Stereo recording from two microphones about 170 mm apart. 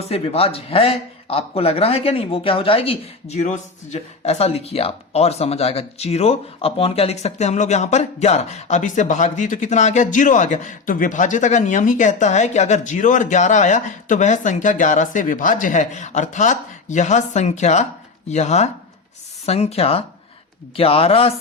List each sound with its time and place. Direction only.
0.1 s speech: 35° left (ahead or behind)